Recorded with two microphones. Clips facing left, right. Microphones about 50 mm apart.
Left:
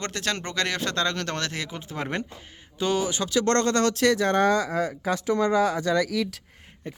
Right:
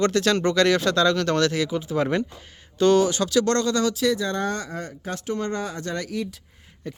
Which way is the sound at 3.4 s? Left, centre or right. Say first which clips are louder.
Even; left.